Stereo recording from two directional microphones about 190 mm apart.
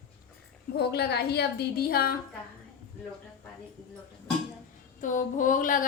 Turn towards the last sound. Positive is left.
turn(degrees=45)  # may be behind; listen again after turning